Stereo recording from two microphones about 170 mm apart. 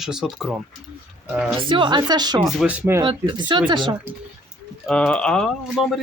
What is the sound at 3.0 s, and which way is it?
Speech, 25° right (ahead or behind).